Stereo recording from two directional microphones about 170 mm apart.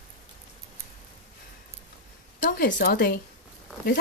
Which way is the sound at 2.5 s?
65° left (ahead or behind).